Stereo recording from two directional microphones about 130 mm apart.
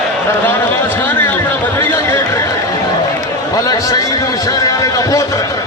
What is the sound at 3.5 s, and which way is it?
A man's voice, 25° left (ahead or behind).